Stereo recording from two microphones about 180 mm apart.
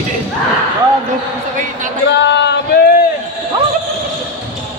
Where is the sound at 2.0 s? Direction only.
75° left (ahead or behind).